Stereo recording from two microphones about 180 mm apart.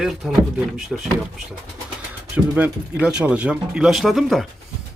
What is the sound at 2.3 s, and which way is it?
Speech, 5° right (ahead or behind).